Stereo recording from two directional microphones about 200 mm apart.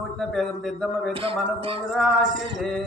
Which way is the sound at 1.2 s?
30° right (ahead or behind).